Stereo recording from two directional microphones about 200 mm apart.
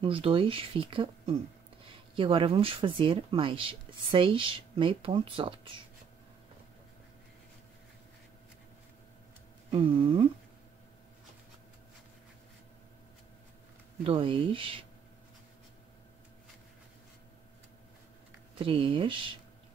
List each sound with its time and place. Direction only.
0.0 s speech: 25° right (ahead or behind)
9.7 s speech: 25° right (ahead or behind)
14.0 s speech: 25° right (ahead or behind)
18.6 s speech: 25° right (ahead or behind)